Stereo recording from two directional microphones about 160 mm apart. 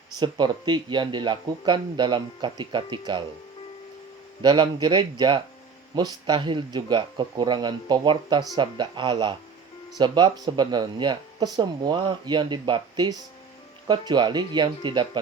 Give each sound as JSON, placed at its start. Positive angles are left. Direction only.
{"t": 0.2, "sound": "speech", "side_deg": -30}
{"t": 4.4, "sound": "speech", "side_deg": -30}